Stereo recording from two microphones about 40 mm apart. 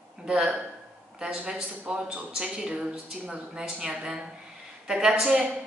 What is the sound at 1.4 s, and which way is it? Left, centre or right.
A woman's voice, right.